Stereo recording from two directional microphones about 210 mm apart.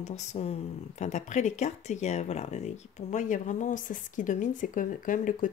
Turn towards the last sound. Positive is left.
turn(degrees=40)  # may be behind; listen again after turning